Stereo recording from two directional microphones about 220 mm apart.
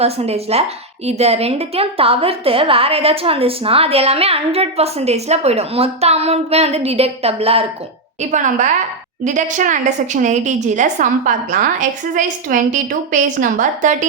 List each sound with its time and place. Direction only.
0.0 s a woman's voice: 30° right (ahead or behind)